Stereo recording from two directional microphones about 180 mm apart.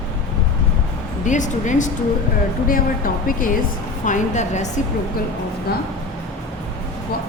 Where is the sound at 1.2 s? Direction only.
45° left (ahead or behind).